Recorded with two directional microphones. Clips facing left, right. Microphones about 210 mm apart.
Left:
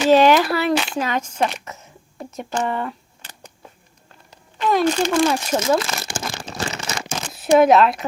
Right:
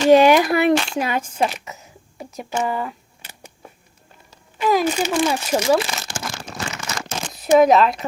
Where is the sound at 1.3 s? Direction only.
5° right (ahead or behind).